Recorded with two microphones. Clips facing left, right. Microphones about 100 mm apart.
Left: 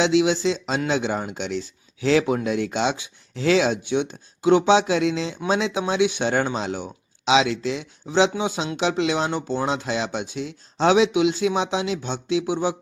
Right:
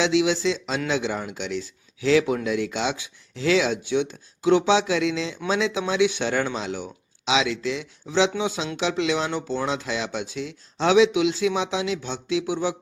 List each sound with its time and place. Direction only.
0.0 s speech: 25° left (ahead or behind)